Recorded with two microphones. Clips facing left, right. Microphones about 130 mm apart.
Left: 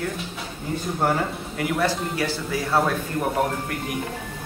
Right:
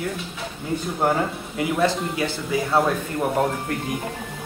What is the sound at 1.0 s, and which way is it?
Speech, 20° right (ahead or behind).